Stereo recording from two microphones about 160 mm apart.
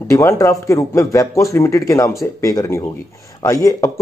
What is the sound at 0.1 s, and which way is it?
Speech, 20° left (ahead or behind).